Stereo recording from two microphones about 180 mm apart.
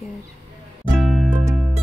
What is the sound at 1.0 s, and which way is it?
Music, centre (ahead or behind).